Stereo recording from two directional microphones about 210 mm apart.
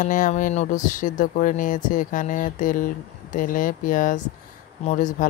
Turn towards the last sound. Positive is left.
turn(degrees=35)  # may be behind; listen again after turning